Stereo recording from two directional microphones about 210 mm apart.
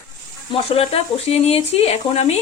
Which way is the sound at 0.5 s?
25° left (ahead or behind).